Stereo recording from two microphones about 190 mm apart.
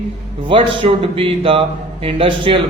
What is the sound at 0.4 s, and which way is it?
A man's voice, 30° right (ahead or behind).